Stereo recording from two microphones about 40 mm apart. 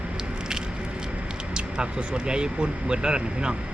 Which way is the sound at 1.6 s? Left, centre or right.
Right.